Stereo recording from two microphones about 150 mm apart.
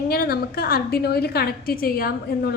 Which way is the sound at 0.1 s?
90° left.